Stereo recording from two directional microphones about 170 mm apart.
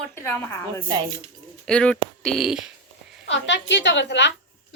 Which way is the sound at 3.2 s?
90° left.